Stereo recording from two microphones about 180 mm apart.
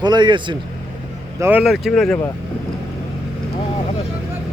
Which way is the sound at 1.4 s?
5° right (ahead or behind).